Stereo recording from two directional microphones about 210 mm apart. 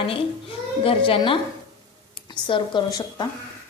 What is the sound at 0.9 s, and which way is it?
A woman's voice, 25° left (ahead or behind).